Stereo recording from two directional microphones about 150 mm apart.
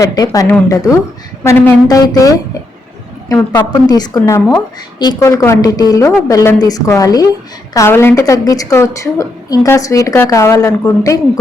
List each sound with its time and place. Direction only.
0.0 s a woman's voice: 25° left (ahead or behind)
3.8 s a woman's voice: 25° left (ahead or behind)